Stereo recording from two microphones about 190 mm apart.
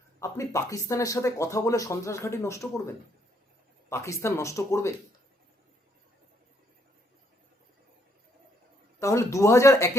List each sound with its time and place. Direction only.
0.2 s speech: 15° left (ahead or behind)
9.0 s speech: 15° left (ahead or behind)